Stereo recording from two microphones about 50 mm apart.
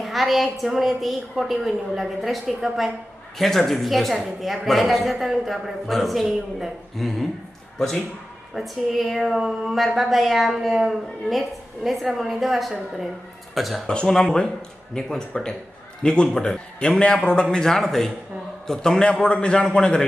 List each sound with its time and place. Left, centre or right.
0.0 s speech: centre
13.8 s a man's voice: centre